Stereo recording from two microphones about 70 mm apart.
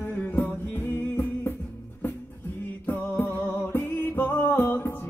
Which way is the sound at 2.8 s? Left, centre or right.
Left.